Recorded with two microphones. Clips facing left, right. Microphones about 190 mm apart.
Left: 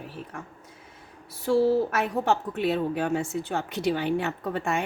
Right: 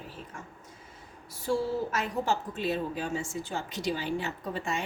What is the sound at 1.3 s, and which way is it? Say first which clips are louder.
Speech: left 8 dB; 65° left (ahead or behind).